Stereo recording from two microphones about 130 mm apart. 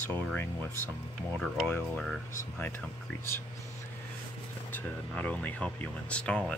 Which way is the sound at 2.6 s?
15° left (ahead or behind).